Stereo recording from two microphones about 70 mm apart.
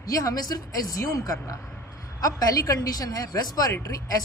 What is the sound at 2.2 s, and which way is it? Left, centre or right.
Speech, left.